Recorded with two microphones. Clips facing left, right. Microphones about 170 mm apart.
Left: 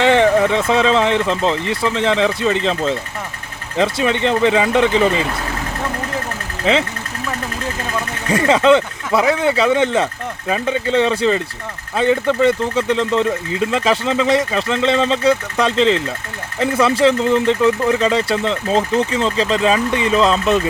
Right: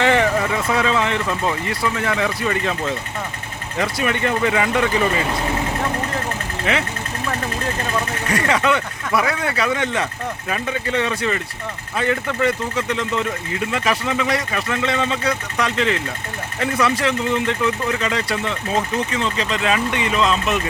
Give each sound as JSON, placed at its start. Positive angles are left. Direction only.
{"t": 0.0, "sound": "speech", "side_deg": 20}
{"t": 8.3, "sound": "speech", "side_deg": 25}